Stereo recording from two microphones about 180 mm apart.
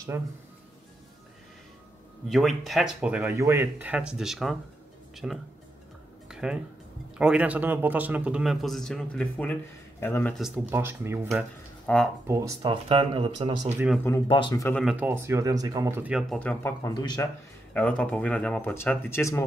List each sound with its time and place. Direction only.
0.1 s speech: 15° right (ahead or behind)
2.2 s a man's voice: centre (ahead or behind)
6.2 s music: 5° right (ahead or behind)
7.2 s a man's voice: 5° right (ahead or behind); by 10.4 s 10° left (ahead or behind)
10.7 s speech: 10° right (ahead or behind)
11.8 s speech: 5° left (ahead or behind)
12.3 s speech: 20° right (ahead or behind)
12.8 s speech: 30° right (ahead or behind)
14.2 s speech: 25° left (ahead or behind)
15.0 s speech: 15° right (ahead or behind)
16.3 s speech: 10° left (ahead or behind)
16.8 s speech: 25° left (ahead or behind)
17.7 s speech: 10° left (ahead or behind)